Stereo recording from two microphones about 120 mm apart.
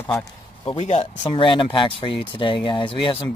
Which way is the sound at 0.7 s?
65° left (ahead or behind).